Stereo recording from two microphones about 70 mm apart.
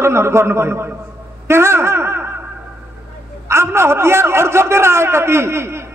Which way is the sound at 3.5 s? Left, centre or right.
Right.